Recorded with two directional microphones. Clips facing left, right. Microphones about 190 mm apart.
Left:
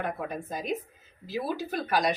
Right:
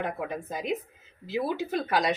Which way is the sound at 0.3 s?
20° right (ahead or behind).